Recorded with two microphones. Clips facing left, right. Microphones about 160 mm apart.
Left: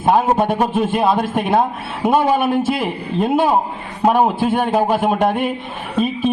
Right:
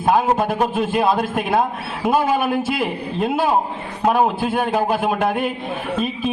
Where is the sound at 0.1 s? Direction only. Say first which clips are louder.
Left 2 dB; 30° left (ahead or behind).